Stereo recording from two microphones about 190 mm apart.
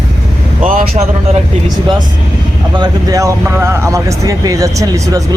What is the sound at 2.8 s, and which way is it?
Speech, 15° right (ahead or behind).